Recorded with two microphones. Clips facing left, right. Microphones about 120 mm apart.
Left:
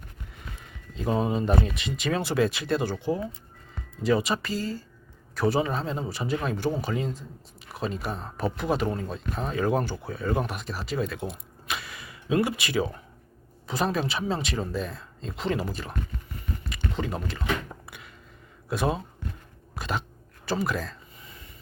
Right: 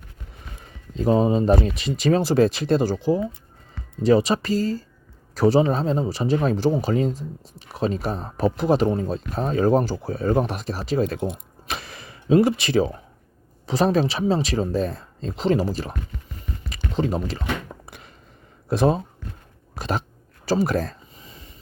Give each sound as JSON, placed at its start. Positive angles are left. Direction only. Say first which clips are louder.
{"t": 0.9, "sound": "speech", "louder": "right 7 dB", "side_deg": -30}
{"t": 4.0, "sound": "speech", "louder": "right 7 dB", "side_deg": -40}
{"t": 11.3, "sound": "a sound", "louder": "right 4 dB", "side_deg": -40}
{"t": 13.7, "sound": "speech", "louder": "right 7 dB", "side_deg": -35}
{"t": 18.7, "sound": "speech", "louder": "right 7 dB", "side_deg": -35}
{"t": 20.6, "sound": "speech", "louder": "right 7 dB", "side_deg": -40}
{"t": 21.2, "sound": "a sound", "louder": "right 3 dB", "side_deg": -25}